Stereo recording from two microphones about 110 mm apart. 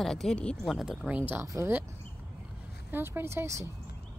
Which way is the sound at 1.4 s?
30° right (ahead or behind).